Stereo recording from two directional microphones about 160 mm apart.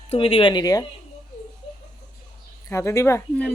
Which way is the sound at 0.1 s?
35° left (ahead or behind).